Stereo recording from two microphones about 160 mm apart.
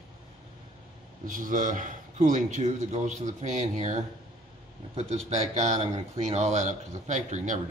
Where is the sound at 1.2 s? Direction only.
55° right (ahead or behind).